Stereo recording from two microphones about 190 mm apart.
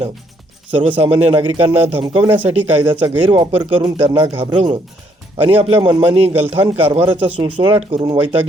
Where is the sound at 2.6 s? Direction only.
10° right (ahead or behind).